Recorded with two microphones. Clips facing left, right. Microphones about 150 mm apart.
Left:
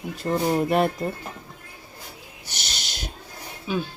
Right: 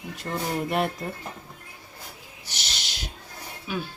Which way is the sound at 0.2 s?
40° left (ahead or behind).